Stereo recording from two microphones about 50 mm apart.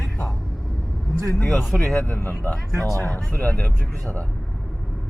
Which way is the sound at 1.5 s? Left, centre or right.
Left.